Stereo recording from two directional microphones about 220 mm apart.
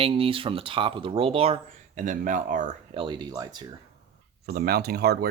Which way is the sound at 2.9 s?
20° right (ahead or behind).